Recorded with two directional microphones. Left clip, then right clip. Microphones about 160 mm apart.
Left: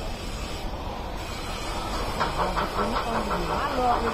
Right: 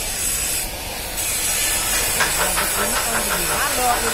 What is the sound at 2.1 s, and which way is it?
Hiss, 50° right (ahead or behind).